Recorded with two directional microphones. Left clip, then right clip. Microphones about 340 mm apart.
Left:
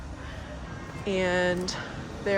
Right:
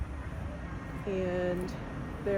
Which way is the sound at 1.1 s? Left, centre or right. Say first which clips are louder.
Left 7 dB; centre.